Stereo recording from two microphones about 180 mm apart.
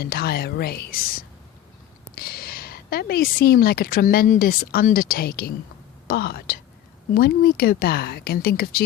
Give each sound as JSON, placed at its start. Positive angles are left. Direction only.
{"t": 0.0, "sound": "a woman's voice", "side_deg": 60}